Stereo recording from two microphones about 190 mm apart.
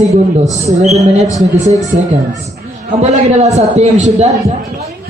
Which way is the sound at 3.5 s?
40° right (ahead or behind).